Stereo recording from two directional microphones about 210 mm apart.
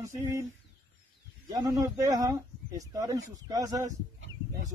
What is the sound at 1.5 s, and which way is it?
Speech, 15° right (ahead or behind).